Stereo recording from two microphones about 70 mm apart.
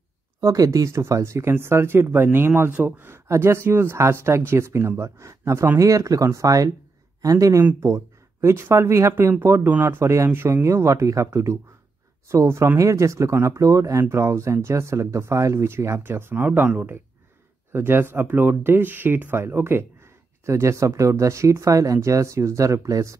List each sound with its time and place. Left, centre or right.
0.4 s speech: right
3.3 s speech: right
7.8 s speech: right
20.4 s speech: right